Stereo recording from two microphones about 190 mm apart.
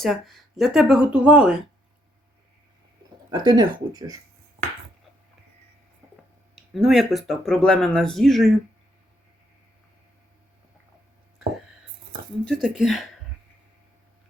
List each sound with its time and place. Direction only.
0.0 s speech: centre (ahead or behind)
3.3 s speech: 20° right (ahead or behind)
6.6 s speech: centre (ahead or behind)
12.6 s speech: centre (ahead or behind)